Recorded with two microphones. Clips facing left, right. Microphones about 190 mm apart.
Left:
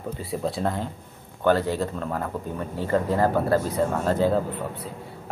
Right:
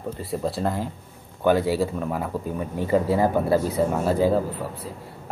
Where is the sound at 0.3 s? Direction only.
Centre (ahead or behind).